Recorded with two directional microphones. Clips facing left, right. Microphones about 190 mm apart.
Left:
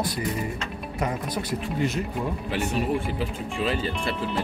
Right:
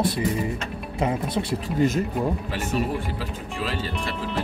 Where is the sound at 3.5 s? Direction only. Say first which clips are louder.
Left 3 dB; centre (ahead or behind).